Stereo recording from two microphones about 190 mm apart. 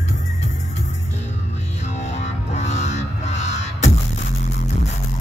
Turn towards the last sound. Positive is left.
turn(degrees=35)  # may be behind; listen again after turning